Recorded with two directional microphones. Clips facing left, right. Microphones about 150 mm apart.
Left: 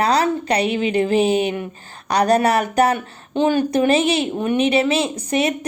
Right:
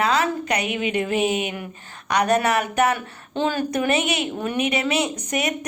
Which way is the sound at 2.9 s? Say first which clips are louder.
Left 5 dB; 20° left (ahead or behind).